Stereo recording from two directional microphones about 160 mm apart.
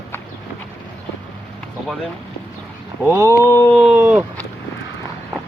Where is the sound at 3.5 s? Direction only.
15° left (ahead or behind).